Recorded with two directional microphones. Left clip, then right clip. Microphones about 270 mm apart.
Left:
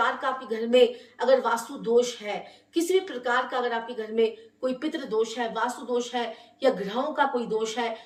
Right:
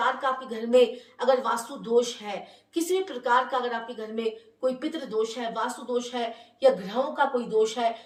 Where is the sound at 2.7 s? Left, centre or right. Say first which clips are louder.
Left 2 dB; centre.